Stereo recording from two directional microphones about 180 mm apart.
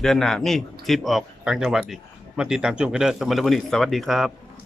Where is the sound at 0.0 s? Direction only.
Centre (ahead or behind).